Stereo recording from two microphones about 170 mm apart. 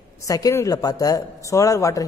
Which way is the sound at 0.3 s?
20° left (ahead or behind).